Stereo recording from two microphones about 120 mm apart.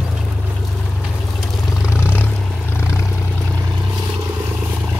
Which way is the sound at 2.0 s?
20° left (ahead or behind).